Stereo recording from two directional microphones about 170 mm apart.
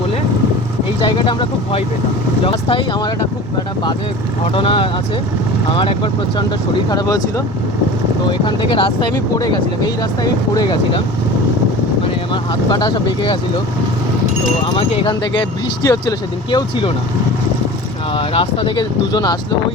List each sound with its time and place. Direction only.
1.0 s speech: 30° left (ahead or behind)
4.5 s speech: 30° left (ahead or behind)
12.3 s speech: 25° left (ahead or behind)
14.8 s speech: 35° left (ahead or behind)
18.1 s speech: 35° left (ahead or behind)